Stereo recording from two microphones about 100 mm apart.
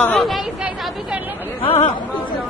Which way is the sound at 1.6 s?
75° left (ahead or behind).